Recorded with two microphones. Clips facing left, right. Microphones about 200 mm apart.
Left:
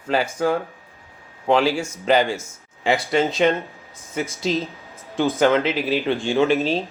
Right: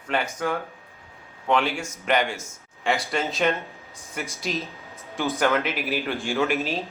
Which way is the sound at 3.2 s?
Centre (ahead or behind).